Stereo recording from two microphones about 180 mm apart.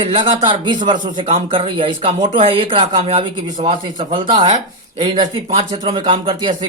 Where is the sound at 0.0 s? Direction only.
30° right (ahead or behind).